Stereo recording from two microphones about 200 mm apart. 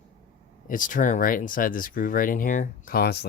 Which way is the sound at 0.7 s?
40° left (ahead or behind).